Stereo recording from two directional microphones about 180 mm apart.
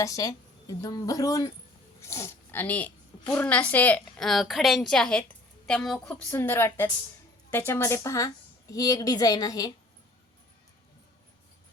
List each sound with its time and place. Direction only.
0.0 s a woman's voice: 20° left (ahead or behind)